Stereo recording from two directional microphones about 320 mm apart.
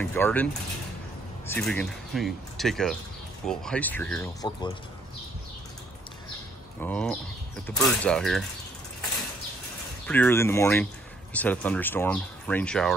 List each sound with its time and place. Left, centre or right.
0.0 s speech: centre
1.5 s speech: centre
6.8 s speech: centre
10.0 s speech: centre